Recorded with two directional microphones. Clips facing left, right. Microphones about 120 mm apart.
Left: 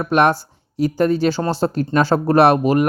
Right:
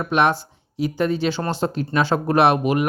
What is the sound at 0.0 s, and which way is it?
Speech, 45° left (ahead or behind).